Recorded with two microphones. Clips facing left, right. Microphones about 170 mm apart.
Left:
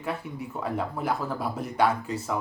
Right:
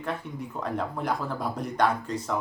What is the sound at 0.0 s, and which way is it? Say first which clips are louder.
Speech: even; 5° left (ahead or behind).